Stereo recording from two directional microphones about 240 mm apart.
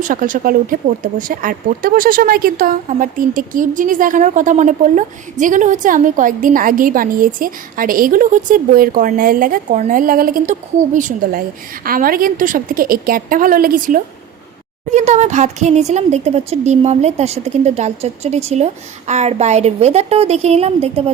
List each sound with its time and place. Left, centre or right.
0.0 s speech: right